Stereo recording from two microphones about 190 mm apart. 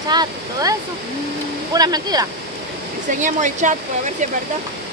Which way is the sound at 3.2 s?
40° right (ahead or behind).